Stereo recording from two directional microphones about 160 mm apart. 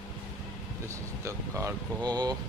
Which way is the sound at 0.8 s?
15° right (ahead or behind).